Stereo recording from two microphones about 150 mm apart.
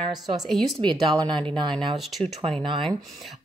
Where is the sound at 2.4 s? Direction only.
35° right (ahead or behind).